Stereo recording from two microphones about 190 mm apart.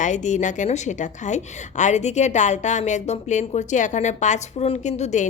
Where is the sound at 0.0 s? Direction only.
40° left (ahead or behind).